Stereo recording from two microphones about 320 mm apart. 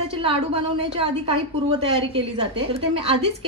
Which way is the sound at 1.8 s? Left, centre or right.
Centre.